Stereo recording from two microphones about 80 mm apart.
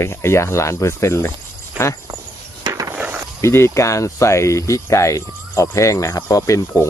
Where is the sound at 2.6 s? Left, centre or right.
Right.